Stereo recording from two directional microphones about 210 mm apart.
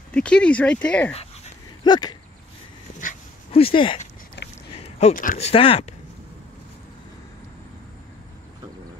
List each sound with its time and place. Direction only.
0.1 s speech: 5° left (ahead or behind)
1.1 s dog: 25° left (ahead or behind)
3.5 s speech: 25° left (ahead or behind)
4.4 s a sound: 55° left (ahead or behind)
4.8 s speech: 30° left (ahead or behind)
5.5 s speech: 25° left (ahead or behind)